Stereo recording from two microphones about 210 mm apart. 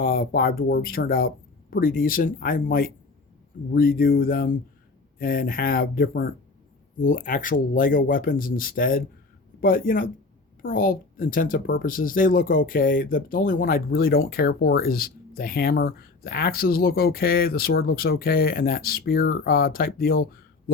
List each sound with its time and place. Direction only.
0.0 s speech: 45° left (ahead or behind)